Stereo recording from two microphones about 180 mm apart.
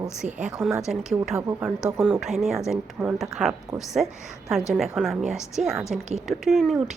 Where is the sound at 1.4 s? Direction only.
15° right (ahead or behind).